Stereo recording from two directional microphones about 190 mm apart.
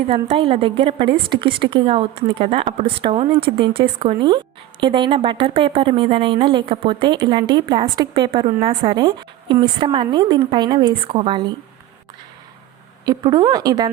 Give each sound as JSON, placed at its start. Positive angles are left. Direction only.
{"t": 0.1, "sound": "a woman's voice", "side_deg": -30}
{"t": 13.1, "sound": "a woman's voice", "side_deg": -20}